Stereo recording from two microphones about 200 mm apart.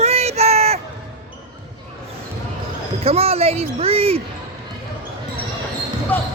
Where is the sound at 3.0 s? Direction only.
30° right (ahead or behind).